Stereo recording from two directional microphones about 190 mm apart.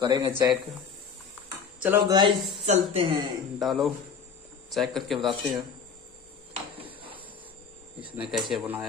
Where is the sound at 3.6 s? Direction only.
Centre (ahead or behind).